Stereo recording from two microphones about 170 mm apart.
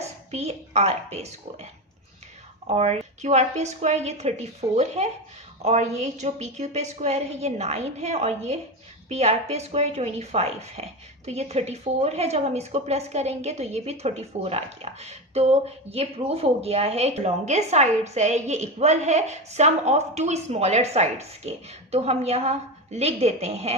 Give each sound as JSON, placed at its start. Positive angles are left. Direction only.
{"t": 0.3, "sound": "speech", "side_deg": -40}
{"t": 2.6, "sound": "speech", "side_deg": -40}